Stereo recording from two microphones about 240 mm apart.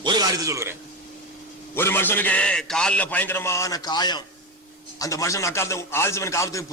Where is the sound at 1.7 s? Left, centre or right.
Centre.